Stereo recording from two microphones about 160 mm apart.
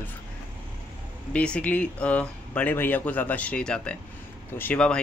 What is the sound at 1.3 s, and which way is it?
Speech, 5° left (ahead or behind).